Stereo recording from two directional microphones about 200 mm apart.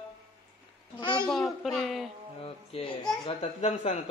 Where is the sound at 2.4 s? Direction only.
25° left (ahead or behind).